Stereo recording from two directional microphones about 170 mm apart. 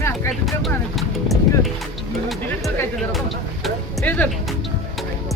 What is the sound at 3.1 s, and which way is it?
Speech, centre (ahead or behind).